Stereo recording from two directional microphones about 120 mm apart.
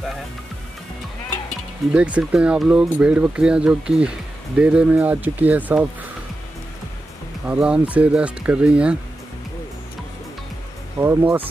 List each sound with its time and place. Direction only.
1.9 s speech: 10° right (ahead or behind)
7.4 s speech: 10° right (ahead or behind)
11.0 s speech: 15° right (ahead or behind)